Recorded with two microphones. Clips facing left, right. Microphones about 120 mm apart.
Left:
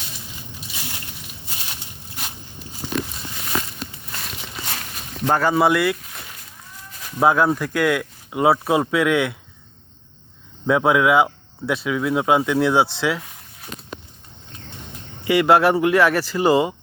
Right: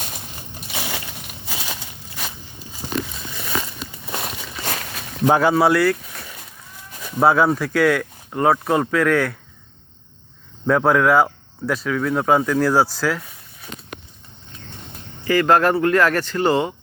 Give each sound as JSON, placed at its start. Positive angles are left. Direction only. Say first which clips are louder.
{"t": 0.7, "sound": "a sound", "louder": "right 9 dB", "side_deg": -80}
{"t": 4.2, "sound": "a sound", "louder": "even", "side_deg": -55}
{"t": 5.2, "sound": "speech", "louder": "right 3 dB", "side_deg": -10}
{"t": 5.7, "sound": "speech", "louder": "right 2 dB", "side_deg": 0}
{"t": 7.2, "sound": "speech", "louder": "right 1 dB", "side_deg": 0}
{"t": 10.7, "sound": "speech", "louder": "right 1 dB", "side_deg": 5}
{"t": 15.2, "sound": "speech", "louder": "left 1 dB", "side_deg": 10}